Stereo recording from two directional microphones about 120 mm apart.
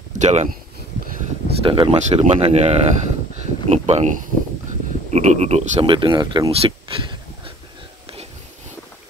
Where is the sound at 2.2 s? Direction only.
60° right (ahead or behind).